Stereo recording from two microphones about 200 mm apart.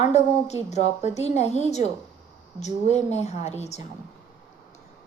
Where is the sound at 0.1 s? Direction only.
35° left (ahead or behind).